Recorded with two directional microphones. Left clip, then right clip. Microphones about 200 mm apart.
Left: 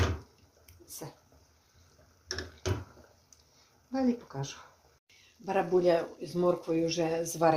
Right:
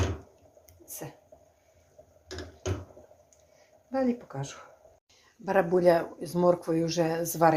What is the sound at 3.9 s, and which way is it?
Speech, 20° right (ahead or behind).